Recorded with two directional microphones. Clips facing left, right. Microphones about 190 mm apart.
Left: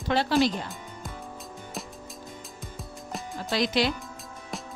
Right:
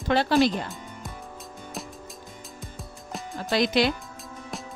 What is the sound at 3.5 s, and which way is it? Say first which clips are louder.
Speech: right 3 dB; 55° right (ahead or behind).